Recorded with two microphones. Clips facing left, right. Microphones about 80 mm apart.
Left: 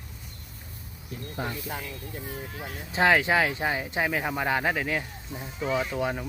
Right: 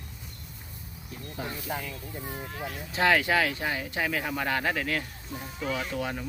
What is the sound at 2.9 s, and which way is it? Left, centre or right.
Speech, left.